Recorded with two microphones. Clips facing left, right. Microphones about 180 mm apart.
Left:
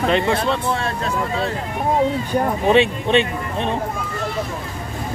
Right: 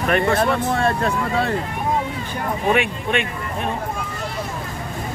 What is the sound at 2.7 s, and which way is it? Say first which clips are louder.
Speech: left 5 dB; 25° left (ahead or behind).